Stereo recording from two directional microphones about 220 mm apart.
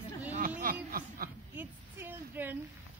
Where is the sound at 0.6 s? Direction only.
40° right (ahead or behind).